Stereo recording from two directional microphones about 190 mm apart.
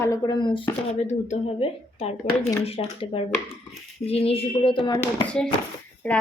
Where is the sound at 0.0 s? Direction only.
20° left (ahead or behind).